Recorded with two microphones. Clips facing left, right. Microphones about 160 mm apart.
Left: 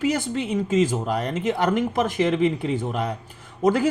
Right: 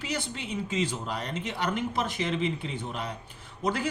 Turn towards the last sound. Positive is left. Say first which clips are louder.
# left 10 dB
turn(degrees=45)  # may be behind; listen again after turning